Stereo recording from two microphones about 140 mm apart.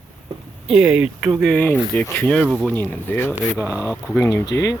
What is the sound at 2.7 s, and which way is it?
Speech, 15° left (ahead or behind).